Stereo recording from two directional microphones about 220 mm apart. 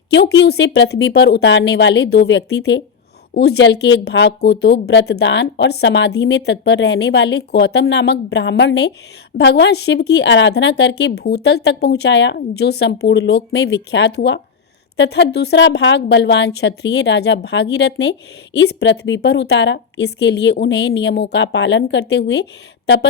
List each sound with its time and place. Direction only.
0.1 s a woman's voice: 50° left (ahead or behind)